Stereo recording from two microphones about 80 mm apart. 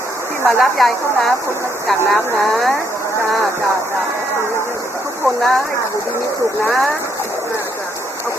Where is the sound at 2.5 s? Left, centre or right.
Centre.